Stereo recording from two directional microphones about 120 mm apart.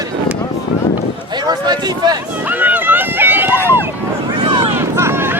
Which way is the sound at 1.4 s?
35° right (ahead or behind).